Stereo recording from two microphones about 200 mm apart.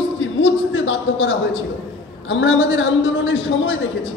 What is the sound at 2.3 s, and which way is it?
A man's voice, 70° left (ahead or behind).